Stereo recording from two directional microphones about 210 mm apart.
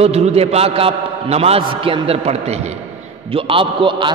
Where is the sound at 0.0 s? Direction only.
30° right (ahead or behind).